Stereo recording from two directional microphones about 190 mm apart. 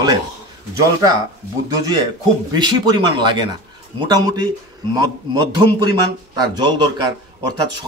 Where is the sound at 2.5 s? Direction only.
20° right (ahead or behind).